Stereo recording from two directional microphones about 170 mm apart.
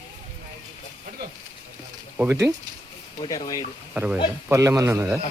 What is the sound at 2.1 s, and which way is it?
Speech, 10° right (ahead or behind).